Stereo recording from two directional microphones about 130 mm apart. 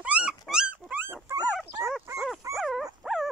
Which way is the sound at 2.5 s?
Centre (ahead or behind).